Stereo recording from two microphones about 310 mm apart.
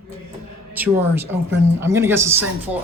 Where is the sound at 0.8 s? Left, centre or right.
Centre.